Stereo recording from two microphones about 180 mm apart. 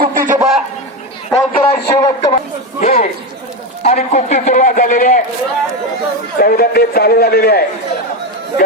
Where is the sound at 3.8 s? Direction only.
35° left (ahead or behind).